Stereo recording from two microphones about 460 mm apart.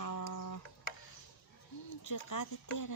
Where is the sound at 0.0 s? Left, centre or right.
Left.